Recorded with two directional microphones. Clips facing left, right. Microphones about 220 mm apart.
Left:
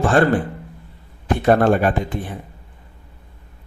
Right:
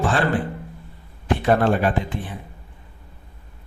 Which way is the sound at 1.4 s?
45° left (ahead or behind).